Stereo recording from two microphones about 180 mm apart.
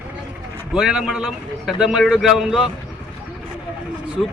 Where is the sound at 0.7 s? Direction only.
5° right (ahead or behind).